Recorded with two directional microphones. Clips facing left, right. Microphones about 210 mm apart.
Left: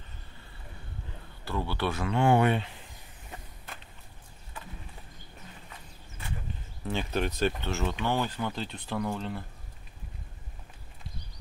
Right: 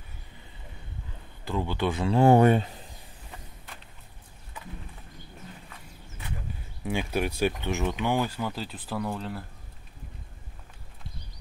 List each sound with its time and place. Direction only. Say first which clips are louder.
1.4 s speech: right 3 dB; 15° right (ahead or behind)
2.0 s speech: right 5 dB; 35° right (ahead or behind)
6.8 s speech: right 2 dB; 10° right (ahead or behind)